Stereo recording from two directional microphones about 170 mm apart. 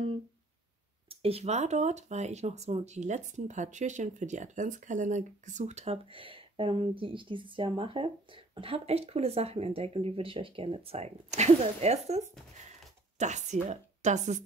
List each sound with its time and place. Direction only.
1.0 s speech: 35° right (ahead or behind)